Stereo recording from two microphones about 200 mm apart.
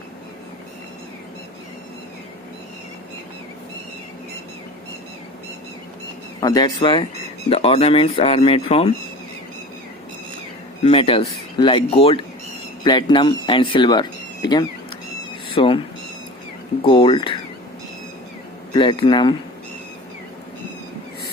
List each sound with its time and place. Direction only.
6.4 s speech: 20° left (ahead or behind)
10.8 s speech: 25° left (ahead or behind)
16.8 s speech: 25° left (ahead or behind)
18.7 s speech: 25° left (ahead or behind)